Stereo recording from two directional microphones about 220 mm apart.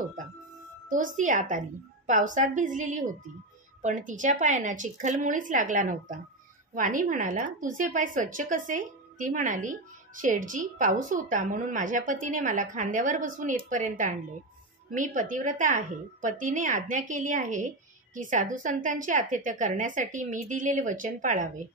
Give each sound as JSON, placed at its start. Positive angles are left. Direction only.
{"t": 0.8, "sound": "a woman's voice", "side_deg": -35}